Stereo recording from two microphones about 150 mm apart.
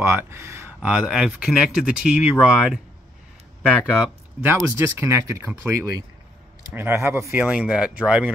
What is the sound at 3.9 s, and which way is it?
Speech, 10° right (ahead or behind).